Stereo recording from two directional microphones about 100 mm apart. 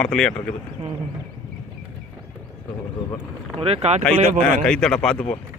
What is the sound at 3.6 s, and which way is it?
Speech, 85° right.